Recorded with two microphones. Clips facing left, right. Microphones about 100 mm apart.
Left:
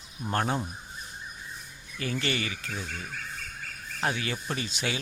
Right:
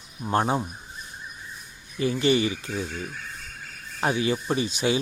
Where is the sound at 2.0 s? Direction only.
20° right (ahead or behind).